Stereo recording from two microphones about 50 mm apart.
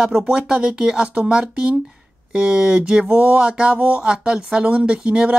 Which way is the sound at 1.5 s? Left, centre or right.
Right.